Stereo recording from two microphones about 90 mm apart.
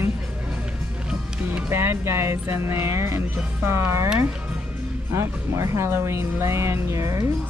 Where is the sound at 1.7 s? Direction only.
30° right (ahead or behind).